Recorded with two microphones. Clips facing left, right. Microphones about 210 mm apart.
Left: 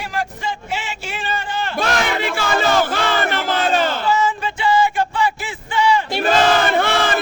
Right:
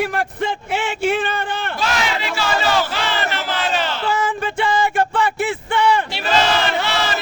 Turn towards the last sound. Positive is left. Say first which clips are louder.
# left 3 dB
turn(degrees=50)  # may be behind; listen again after turning